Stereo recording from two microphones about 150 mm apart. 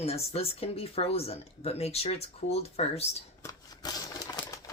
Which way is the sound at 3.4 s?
25° left (ahead or behind).